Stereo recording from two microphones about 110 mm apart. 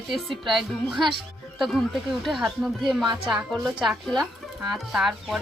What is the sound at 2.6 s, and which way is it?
Speech, centre (ahead or behind).